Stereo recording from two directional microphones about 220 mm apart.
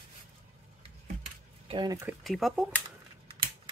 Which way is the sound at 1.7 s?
15° right (ahead or behind).